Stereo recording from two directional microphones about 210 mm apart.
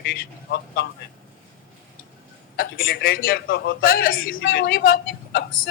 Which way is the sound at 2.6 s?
45° left (ahead or behind).